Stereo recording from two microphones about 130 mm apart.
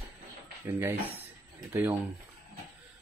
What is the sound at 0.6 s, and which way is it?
Speech, 20° right (ahead or behind).